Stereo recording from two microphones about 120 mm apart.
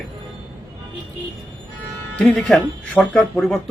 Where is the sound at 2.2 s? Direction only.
10° left (ahead or behind).